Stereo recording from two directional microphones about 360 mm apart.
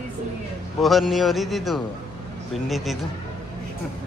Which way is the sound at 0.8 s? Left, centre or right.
Centre.